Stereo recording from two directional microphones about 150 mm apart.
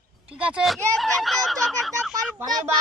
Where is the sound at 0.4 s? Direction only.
5° right (ahead or behind).